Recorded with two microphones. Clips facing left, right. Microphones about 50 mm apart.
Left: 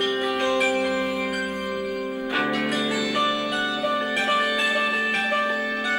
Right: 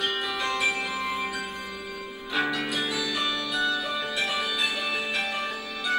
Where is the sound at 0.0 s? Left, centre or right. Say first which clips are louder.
Left 5 dB; left.